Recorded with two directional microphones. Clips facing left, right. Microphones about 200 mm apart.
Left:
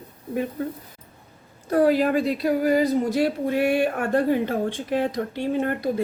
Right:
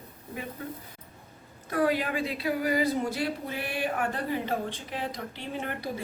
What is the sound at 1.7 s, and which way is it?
Speech, 40° left (ahead or behind).